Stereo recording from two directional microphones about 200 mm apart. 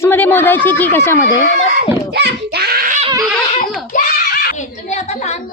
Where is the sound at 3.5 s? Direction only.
35° left (ahead or behind).